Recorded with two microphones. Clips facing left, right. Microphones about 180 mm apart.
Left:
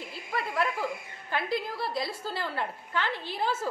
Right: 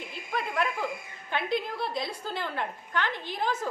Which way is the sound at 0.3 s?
5° left (ahead or behind).